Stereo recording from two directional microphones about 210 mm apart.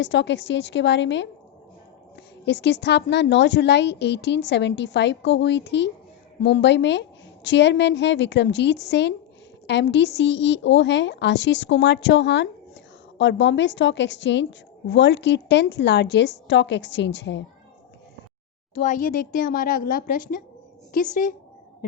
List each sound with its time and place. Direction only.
0.0 s a woman's voice: 60° left (ahead or behind)
2.5 s a woman's voice: 55° left (ahead or behind)
18.7 s a woman's voice: 35° left (ahead or behind)